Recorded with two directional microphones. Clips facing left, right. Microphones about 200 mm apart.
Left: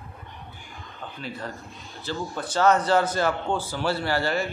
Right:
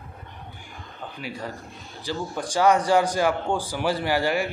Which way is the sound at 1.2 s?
10° right (ahead or behind).